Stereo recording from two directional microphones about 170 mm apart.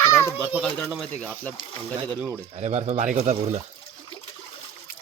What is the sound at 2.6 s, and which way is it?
Speech, 40° right (ahead or behind).